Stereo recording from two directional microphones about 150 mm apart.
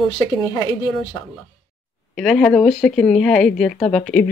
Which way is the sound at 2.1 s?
5° left (ahead or behind).